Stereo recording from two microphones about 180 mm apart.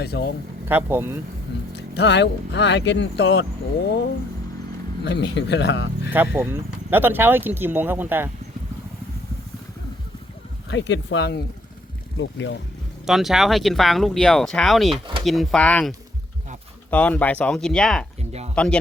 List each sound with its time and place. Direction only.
0.0 s speech: 65° left (ahead or behind)
0.7 s speech: 10° right (ahead or behind)
1.7 s speech: 70° left (ahead or behind)
5.0 s speech: 70° left (ahead or behind)
6.3 s speech: 10° right (ahead or behind)
10.7 s speech: 85° left
12.1 s speech: 90° left
13.1 s speech: centre (ahead or behind)
18.2 s a sound: 35° right (ahead or behind)
18.5 s speech: 5° left (ahead or behind)